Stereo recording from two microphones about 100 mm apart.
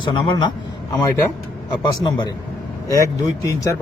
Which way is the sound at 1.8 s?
45° left (ahead or behind).